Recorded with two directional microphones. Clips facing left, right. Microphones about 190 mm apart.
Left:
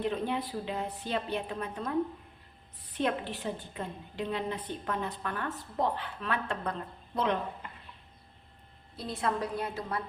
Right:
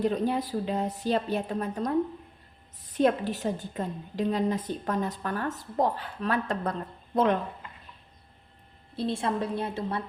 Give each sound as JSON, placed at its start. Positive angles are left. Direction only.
{"t": 0.0, "sound": "a woman's voice", "side_deg": -40}
{"t": 9.0, "sound": "a woman's voice", "side_deg": -30}